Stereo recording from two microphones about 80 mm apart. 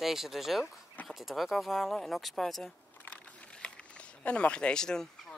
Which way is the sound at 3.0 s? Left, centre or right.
Centre.